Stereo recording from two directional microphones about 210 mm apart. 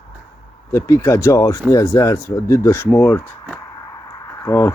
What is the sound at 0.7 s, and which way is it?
Speech, 10° left (ahead or behind).